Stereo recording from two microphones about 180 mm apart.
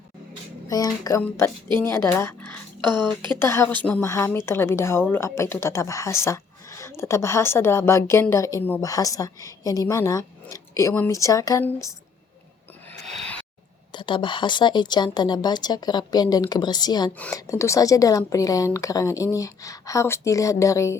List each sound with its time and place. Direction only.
0.7 s a woman's voice: 20° left (ahead or behind)
13.1 s a sound: 5° left (ahead or behind)
13.9 s a woman's voice: 25° left (ahead or behind)